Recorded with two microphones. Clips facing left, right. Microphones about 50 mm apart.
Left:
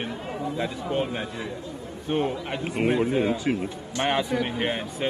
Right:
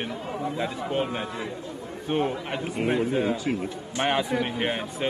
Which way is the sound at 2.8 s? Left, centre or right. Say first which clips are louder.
Left 2 dB; left.